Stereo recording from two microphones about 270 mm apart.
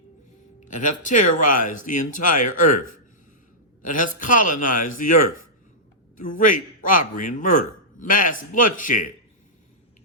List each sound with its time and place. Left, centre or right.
0.6 s a man's voice: left
3.8 s a man's voice: left
6.1 s a man's voice: left